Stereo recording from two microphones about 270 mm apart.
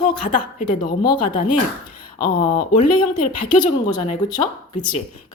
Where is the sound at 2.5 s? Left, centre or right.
Left.